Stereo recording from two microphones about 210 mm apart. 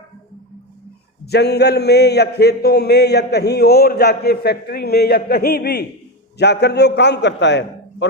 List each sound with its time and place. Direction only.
1.2 s a man's voice: 50° left (ahead or behind)